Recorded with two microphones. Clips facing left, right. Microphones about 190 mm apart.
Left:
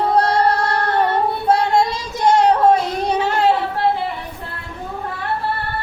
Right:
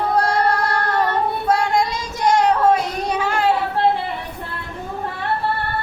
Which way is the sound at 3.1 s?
25° left (ahead or behind).